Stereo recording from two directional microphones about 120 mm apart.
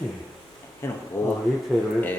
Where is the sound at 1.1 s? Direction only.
20° left (ahead or behind).